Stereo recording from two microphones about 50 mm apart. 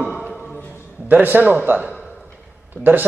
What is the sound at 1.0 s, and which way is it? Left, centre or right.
A man's voice, right.